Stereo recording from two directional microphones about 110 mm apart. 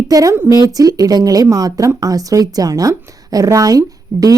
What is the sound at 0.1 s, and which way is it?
A woman's voice, 30° right (ahead or behind).